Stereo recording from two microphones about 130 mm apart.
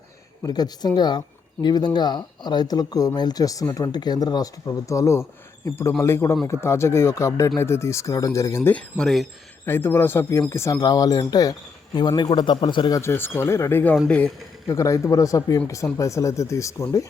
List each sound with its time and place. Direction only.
0.4 s speech: 30° left (ahead or behind)
9.0 s speech: 5° left (ahead or behind)
9.6 s speech: 15° left (ahead or behind); by 13.0 s 35° left (ahead or behind)
13.0 s speech: 20° left (ahead or behind)